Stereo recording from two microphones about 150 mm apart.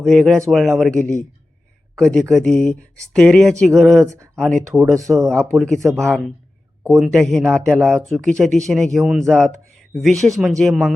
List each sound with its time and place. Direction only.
0.0 s speech: 5° left (ahead or behind)
5.8 s speech: 20° right (ahead or behind)
6.1 s speech: 5° left (ahead or behind)